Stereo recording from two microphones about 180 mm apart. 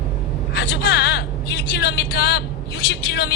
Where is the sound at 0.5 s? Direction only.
65° left (ahead or behind).